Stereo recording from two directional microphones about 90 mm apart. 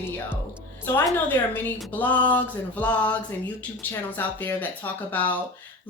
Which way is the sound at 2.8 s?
15° left (ahead or behind).